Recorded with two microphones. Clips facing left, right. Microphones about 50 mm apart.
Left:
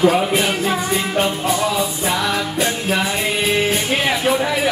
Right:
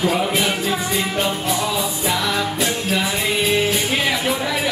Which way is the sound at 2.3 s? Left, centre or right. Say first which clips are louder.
Left 1 dB; left.